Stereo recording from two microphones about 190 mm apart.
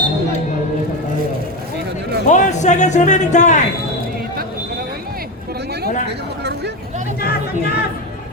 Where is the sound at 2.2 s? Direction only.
40° left (ahead or behind).